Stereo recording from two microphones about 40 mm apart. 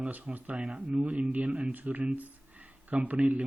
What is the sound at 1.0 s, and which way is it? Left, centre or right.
Speech, right.